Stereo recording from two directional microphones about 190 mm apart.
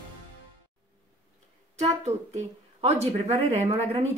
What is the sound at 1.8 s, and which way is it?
Speech, 35° right (ahead or behind).